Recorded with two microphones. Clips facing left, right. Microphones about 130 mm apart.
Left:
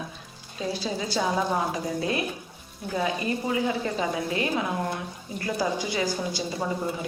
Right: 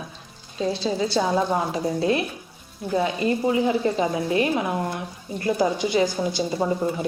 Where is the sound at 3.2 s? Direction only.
25° right (ahead or behind).